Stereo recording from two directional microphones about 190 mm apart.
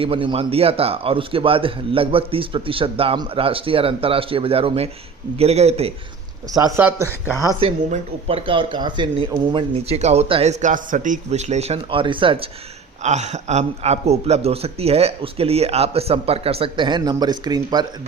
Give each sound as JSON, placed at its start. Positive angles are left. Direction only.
{"t": 0.0, "sound": "a man's voice", "side_deg": -30}
{"t": 6.5, "sound": "a man's voice", "side_deg": -20}
{"t": 7.6, "sound": "a man's voice", "side_deg": -35}
{"t": 13.0, "sound": "a man's voice", "side_deg": -35}